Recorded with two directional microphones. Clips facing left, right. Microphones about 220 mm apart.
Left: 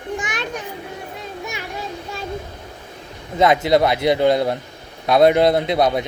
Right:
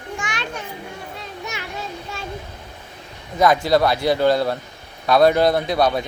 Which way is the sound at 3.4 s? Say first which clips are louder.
Left 1 dB; 20° left (ahead or behind).